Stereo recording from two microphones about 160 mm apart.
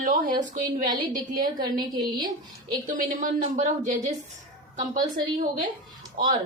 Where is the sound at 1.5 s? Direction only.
25° right (ahead or behind).